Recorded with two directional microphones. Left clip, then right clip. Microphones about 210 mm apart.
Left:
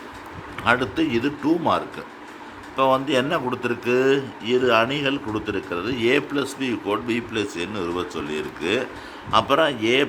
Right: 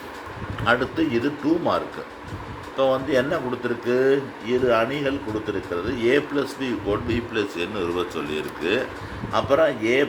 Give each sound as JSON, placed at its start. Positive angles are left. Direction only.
{"t": 0.6, "sound": "a man's voice", "side_deg": 20}